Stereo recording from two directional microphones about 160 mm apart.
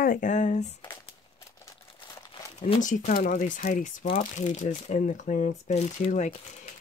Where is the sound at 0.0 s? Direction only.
55° left (ahead or behind).